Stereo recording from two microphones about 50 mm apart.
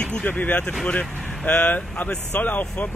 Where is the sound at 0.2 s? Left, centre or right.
Left.